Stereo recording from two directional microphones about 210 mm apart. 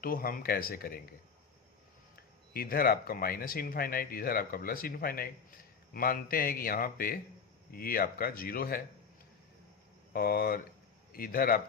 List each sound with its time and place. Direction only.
0.0 s speech: 45° left (ahead or behind)
2.5 s speech: 45° left (ahead or behind)
10.1 s speech: 45° left (ahead or behind)